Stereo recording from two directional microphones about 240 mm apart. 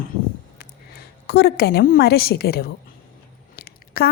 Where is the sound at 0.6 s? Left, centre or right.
Left.